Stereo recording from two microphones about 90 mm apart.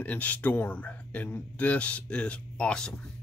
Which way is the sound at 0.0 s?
15° left (ahead or behind).